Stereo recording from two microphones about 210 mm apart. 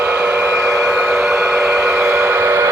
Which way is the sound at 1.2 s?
Centre (ahead or behind).